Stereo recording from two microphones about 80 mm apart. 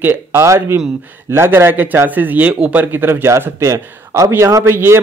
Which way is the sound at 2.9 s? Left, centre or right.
Right.